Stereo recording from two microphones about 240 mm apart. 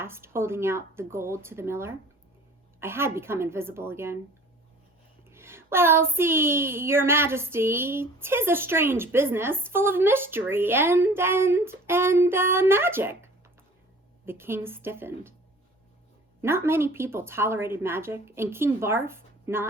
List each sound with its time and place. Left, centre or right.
0.0 s a woman's voice: centre
5.3 s a woman's voice: centre
16.4 s a woman's voice: centre